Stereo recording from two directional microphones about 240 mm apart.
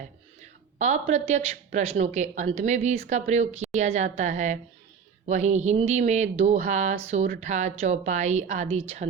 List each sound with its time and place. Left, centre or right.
0.8 s a woman's voice: right